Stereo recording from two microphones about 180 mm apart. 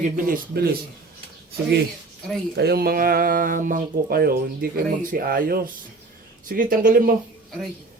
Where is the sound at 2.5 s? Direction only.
60° right (ahead or behind).